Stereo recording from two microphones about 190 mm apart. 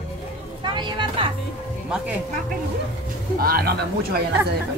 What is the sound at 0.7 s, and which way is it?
Music, 25° right (ahead or behind).